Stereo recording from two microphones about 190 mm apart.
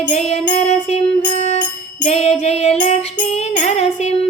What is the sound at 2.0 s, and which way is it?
Music, 35° left (ahead or behind).